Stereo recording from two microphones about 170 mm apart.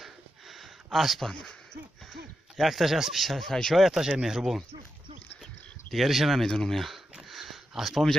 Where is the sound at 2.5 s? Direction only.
Centre (ahead or behind).